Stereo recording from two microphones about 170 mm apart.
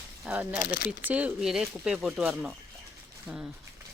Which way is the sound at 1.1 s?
10° right (ahead or behind).